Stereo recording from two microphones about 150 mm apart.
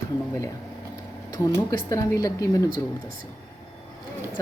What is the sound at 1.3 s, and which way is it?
Speech, 25° left (ahead or behind).